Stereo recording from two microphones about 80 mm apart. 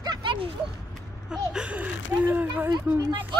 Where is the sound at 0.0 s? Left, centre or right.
Right.